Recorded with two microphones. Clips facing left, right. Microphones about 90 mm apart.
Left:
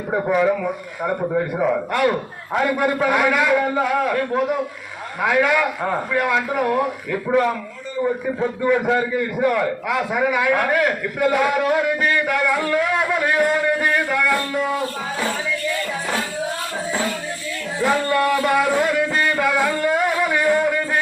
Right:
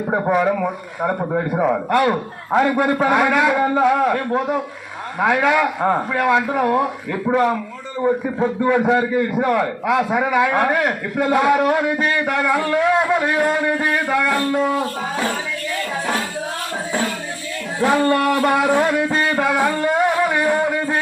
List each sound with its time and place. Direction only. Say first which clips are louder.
0.1 s a man's voice: even; 25° right (ahead or behind)
8.6 s a man's voice: right 1 dB; 30° right (ahead or behind)
17.7 s a man's voice: right 3 dB; 40° right (ahead or behind)
19.1 s music: right 1 dB; 30° right (ahead or behind)